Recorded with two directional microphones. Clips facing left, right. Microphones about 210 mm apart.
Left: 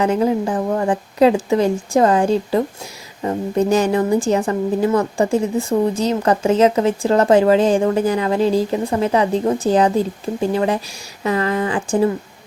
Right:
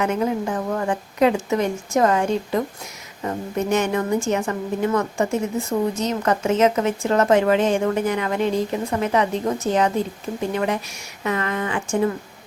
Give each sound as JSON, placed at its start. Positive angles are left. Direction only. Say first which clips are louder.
{"t": 0.0, "sound": "a woman's voice", "louder": "left 5 dB", "side_deg": 30}